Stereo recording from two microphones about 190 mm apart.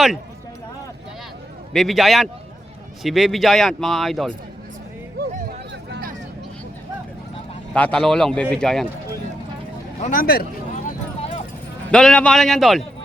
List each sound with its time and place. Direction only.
1.7 s speech: centre (ahead or behind)
5.4 s a sound: 50° right (ahead or behind)
7.7 s speech: 5° left (ahead or behind)
10.0 s a man's voice: 45° left (ahead or behind)
11.9 s speech: 5° left (ahead or behind)